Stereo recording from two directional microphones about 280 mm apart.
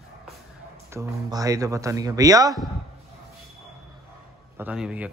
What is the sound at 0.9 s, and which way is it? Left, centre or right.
A man's voice, centre.